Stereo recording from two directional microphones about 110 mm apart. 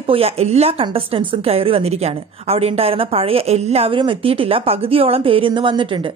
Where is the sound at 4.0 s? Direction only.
55° right (ahead or behind).